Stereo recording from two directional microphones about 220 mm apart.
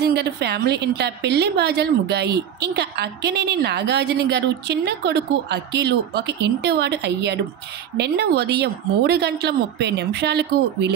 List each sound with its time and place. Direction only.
0.0 s a woman's voice: 50° right (ahead or behind)